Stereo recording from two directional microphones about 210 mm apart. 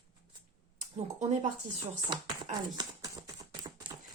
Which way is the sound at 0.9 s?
30° right (ahead or behind).